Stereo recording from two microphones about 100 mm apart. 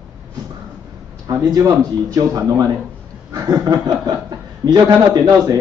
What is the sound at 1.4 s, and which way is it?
A man's voice, 40° right (ahead or behind).